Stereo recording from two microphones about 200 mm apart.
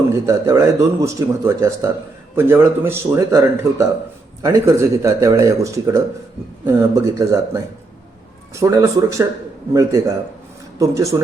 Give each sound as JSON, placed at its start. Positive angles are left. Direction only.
{"t": 0.3, "sound": "speech", "side_deg": -15}